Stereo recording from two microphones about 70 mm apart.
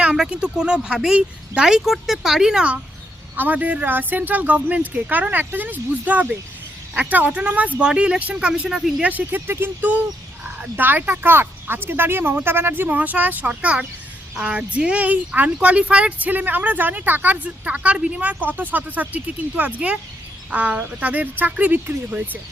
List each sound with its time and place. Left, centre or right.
0.0 s speech: centre
3.3 s speech: right